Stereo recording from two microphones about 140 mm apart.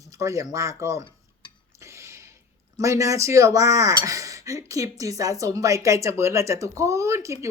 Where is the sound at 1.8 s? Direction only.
20° right (ahead or behind).